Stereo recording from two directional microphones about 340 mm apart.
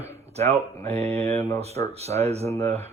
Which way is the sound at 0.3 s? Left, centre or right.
Centre.